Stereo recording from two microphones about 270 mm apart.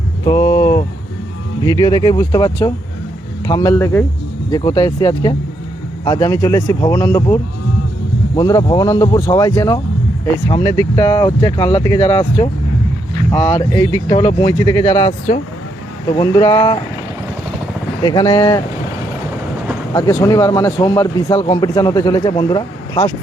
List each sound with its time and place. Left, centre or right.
0.3 s speech: centre
8.4 s speech: centre
18.0 s speech: centre
19.9 s speech: centre